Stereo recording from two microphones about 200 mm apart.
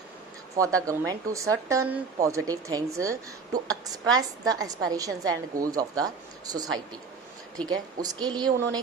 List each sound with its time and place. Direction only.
0.5 s a woman's voice: 15° right (ahead or behind)